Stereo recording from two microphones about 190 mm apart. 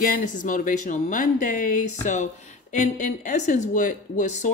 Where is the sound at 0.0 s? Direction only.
45° left (ahead or behind).